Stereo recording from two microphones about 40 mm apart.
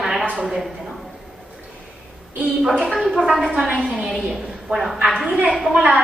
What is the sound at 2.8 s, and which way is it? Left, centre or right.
A woman's voice, centre.